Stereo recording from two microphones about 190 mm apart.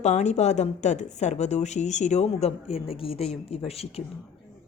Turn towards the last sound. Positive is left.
turn(degrees=30)  # may be behind; listen again after turning